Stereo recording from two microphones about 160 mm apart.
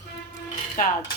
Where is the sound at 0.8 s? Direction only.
55° left (ahead or behind).